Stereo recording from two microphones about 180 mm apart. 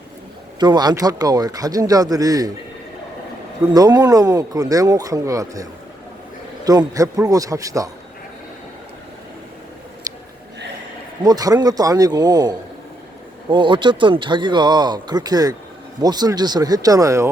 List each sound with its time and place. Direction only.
0.6 s speech: 25° right (ahead or behind)
3.7 s speech: 20° right (ahead or behind)
6.7 s speech: 20° right (ahead or behind)
11.2 s speech: 20° right (ahead or behind)